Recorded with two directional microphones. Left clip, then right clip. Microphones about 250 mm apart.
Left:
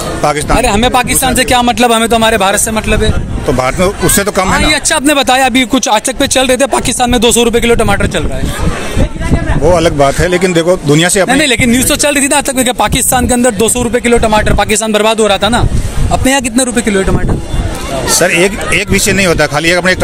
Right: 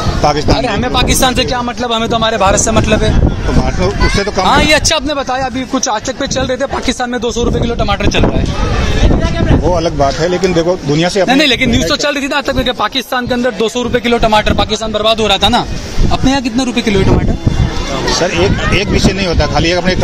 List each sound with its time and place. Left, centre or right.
0.2 s speech: left
0.9 s speech: left
1.5 s speech: left
4.5 s speech: centre
5.0 s speech: left
9.7 s speech: left
11.2 s speech: centre
11.7 s speech: left
13.9 s speech: centre
14.6 s speech: left
15.1 s speech: centre
18.2 s speech: left